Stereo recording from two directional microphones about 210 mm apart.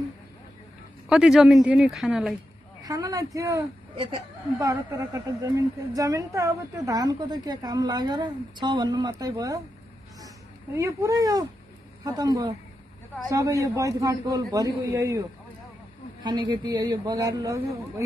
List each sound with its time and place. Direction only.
1.0 s speech: centre (ahead or behind)
2.8 s a woman's voice: 15° right (ahead or behind)
4.6 s a woman's voice: 15° right (ahead or behind)